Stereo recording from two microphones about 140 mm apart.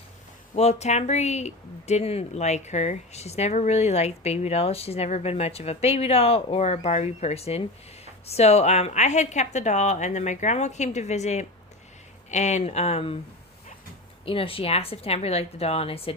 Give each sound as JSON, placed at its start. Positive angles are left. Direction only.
{"t": 0.5, "sound": "a woman's voice", "side_deg": 50}
{"t": 14.3, "sound": "speech", "side_deg": 40}